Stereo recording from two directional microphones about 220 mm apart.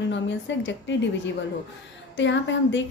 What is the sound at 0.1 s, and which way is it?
A woman's voice, 55° left (ahead or behind).